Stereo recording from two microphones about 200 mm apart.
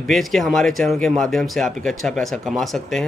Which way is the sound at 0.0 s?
Centre (ahead or behind).